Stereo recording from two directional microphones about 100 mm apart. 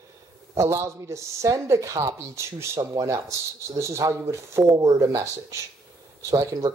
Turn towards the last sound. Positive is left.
turn(degrees=-35)  # may be behind; listen again after turning